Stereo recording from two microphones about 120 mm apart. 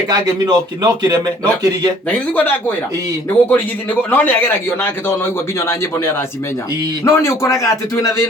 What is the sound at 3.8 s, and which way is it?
A man's voice, 15° left (ahead or behind).